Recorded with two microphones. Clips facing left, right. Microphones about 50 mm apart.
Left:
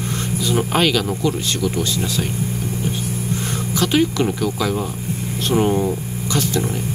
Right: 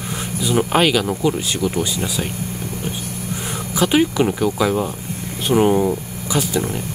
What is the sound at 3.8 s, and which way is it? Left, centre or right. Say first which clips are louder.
Speech: right 2 dB; centre.